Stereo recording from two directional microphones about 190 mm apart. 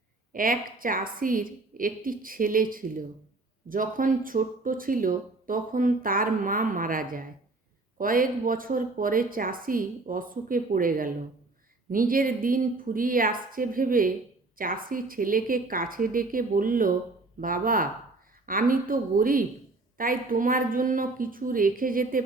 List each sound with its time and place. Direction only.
0.3 s speech: 45° right (ahead or behind)